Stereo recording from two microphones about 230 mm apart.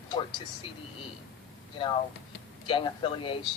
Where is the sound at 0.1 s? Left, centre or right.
Centre.